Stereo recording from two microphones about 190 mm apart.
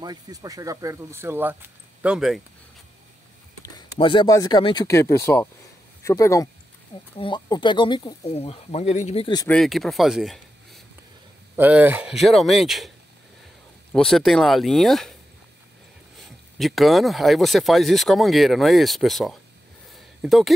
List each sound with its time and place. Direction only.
0.0 s speech: 20° right (ahead or behind); by 2.4 s centre (ahead or behind)
4.0 s speech: 25° left (ahead or behind)
9.5 s speech: centre (ahead or behind)
13.9 s speech: centre (ahead or behind)
16.2 s speech: centre (ahead or behind)